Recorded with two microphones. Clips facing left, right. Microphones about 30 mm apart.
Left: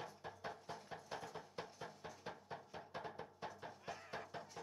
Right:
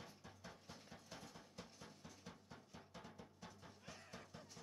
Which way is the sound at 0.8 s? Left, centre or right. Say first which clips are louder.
Left 7 dB; left.